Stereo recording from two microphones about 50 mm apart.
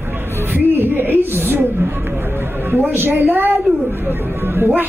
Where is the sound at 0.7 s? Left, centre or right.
Right.